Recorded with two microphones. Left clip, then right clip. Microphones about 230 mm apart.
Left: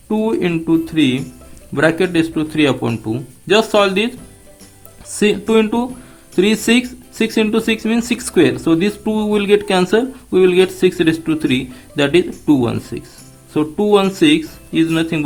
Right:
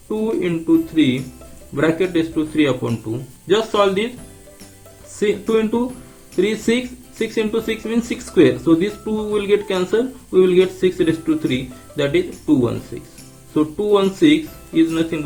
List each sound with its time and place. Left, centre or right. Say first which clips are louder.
0.1 s speech: left 3 dB; left
5.2 s speech: left 4 dB; left
13.5 s speech: left 3 dB; left